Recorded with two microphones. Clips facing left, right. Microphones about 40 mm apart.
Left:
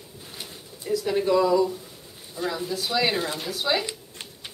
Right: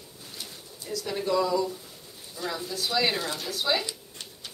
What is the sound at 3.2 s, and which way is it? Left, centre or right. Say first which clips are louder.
Speech: left 3 dB; left.